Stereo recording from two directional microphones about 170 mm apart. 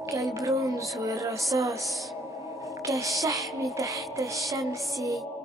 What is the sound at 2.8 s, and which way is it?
Music, 20° right (ahead or behind).